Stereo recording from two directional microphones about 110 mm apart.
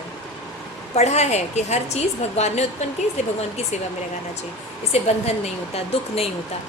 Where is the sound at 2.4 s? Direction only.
80° left.